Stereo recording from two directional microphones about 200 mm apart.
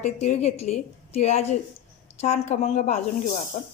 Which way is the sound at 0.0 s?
35° left (ahead or behind).